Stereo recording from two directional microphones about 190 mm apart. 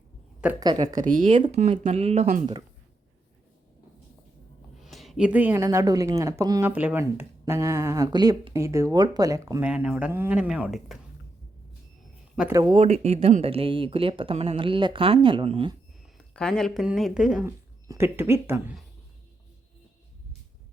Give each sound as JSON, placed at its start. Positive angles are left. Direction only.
{"t": 0.6, "sound": "speech", "side_deg": -20}
{"t": 0.9, "sound": "speech", "side_deg": -45}
{"t": 1.3, "sound": "speech", "side_deg": -30}
{"t": 4.8, "sound": "speech", "side_deg": 0}
{"t": 12.4, "sound": "speech", "side_deg": -15}
{"t": 16.1, "sound": "speech", "side_deg": 5}